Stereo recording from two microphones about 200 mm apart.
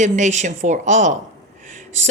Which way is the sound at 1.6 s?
35° right (ahead or behind).